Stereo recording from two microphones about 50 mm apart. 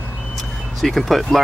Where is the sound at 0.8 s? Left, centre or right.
Centre.